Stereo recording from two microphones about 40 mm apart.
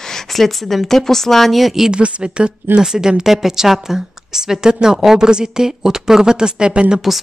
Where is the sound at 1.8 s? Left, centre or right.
Right.